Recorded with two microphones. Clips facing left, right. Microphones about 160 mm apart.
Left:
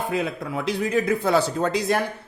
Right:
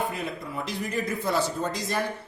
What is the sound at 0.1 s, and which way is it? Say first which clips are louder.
A man's voice: left 7 dB; 90° left.